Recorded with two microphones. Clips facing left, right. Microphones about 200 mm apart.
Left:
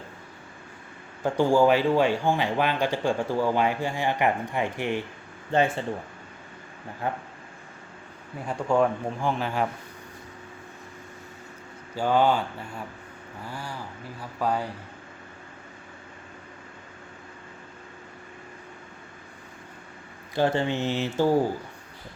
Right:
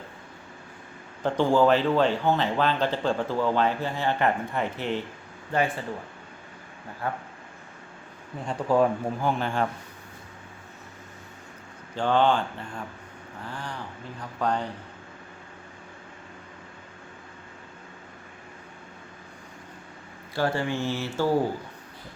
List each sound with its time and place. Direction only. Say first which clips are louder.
1.2 s speech: left 1 dB; 10° left (ahead or behind)
5.5 s mantra: left 3 dB; 25° left (ahead or behind)
7.0 s mantra: left 1 dB; 20° left (ahead or behind)
8.6 s speech: right 1 dB; 5° right (ahead or behind)
11.9 s speech: even; 10° left (ahead or behind)
20.3 s mantra: left 2 dB; 20° left (ahead or behind)